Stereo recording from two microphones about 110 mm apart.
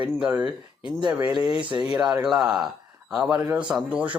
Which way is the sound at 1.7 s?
40° right (ahead or behind).